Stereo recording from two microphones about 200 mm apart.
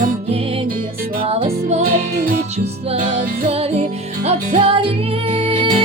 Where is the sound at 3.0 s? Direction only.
45° right (ahead or behind).